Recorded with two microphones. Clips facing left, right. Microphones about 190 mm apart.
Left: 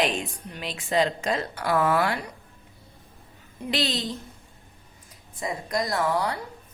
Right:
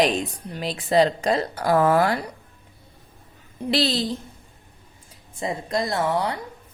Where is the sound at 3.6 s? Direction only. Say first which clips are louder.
Right 5 dB; 35° right (ahead or behind).